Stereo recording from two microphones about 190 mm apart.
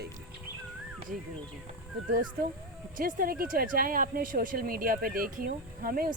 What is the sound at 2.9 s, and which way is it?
Speech, 45° right (ahead or behind).